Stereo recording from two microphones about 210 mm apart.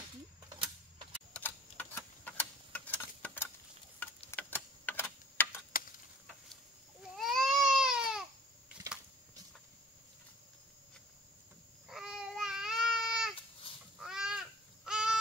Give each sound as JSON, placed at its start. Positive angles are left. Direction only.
{"t": 1.3, "sound": "tick-tock", "side_deg": 10}
{"t": 4.3, "sound": "a sound", "side_deg": 10}
{"t": 5.7, "sound": "tick-tock", "side_deg": 40}
{"t": 7.0, "sound": "baby cry", "side_deg": 0}
{"t": 11.9, "sound": "babbling", "side_deg": -5}